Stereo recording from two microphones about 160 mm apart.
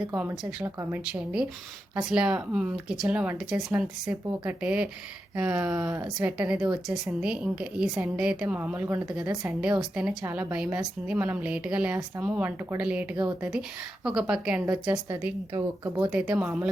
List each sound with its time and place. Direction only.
0.1 s a woman's voice: 15° right (ahead or behind)
15.5 s speech: 25° right (ahead or behind)
16.0 s a woman's voice: 5° right (ahead or behind)